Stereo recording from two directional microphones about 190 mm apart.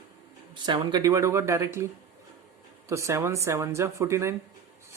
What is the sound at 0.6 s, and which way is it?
Speech, 25° right (ahead or behind).